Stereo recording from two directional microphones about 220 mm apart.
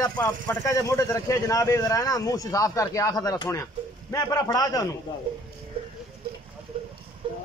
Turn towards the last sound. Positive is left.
turn(degrees=-25)  # may be behind; listen again after turning